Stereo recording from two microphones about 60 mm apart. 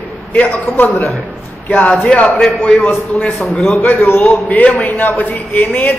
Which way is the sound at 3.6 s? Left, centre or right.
Left.